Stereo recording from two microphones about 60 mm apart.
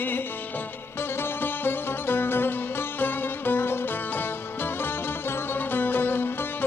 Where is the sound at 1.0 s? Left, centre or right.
Left.